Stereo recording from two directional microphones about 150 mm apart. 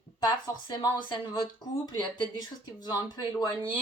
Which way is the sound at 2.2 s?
30° left (ahead or behind).